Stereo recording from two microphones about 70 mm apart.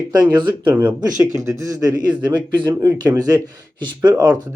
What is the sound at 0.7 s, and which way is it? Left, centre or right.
Speech, right.